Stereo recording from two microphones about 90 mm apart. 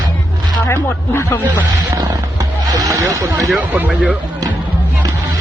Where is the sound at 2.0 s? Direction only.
45° right (ahead or behind).